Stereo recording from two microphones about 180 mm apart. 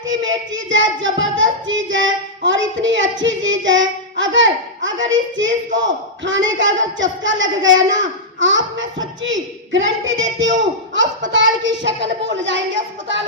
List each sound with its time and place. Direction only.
0.1 s a child's voice: 90° right